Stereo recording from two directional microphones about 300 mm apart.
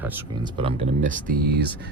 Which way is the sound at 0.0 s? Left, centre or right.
Centre.